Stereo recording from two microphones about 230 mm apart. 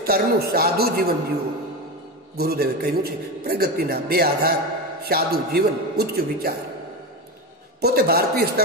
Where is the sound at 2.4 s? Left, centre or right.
Right.